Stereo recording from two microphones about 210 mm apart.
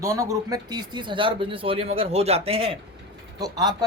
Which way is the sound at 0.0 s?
15° right (ahead or behind).